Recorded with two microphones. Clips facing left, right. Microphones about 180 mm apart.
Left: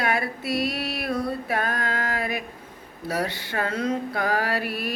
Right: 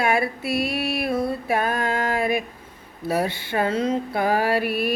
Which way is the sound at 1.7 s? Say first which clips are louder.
Right 5 dB; 25° right (ahead or behind).